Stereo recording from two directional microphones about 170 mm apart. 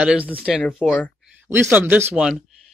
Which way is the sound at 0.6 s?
5° left (ahead or behind).